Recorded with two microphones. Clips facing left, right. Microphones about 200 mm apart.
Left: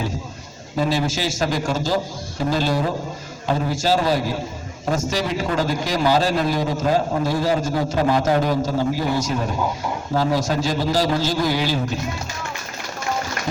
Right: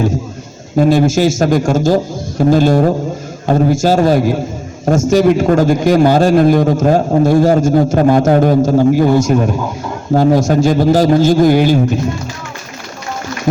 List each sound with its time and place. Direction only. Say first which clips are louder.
0.8 s a man's voice: right 11 dB; 50° right (ahead or behind)